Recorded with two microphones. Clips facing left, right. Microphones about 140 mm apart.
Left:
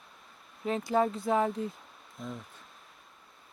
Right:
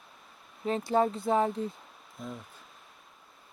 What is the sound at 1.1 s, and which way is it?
Speech, centre (ahead or behind).